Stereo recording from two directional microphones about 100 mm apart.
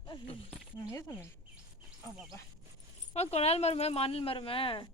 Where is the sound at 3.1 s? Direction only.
90° left; by 4.8 s 65° left (ahead or behind).